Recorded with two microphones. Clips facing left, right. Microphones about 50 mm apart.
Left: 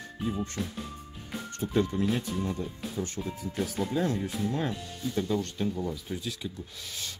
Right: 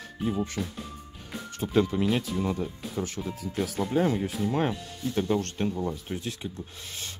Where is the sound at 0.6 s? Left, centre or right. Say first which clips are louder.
Right 2 dB; centre.